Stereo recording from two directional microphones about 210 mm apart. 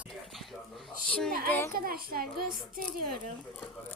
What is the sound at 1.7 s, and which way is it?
A child's voice, 45° right (ahead or behind).